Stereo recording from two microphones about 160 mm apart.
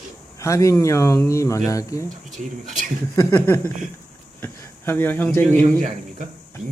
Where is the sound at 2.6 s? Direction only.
50° right (ahead or behind).